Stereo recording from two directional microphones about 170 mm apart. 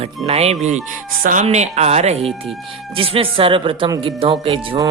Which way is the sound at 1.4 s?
40° right (ahead or behind).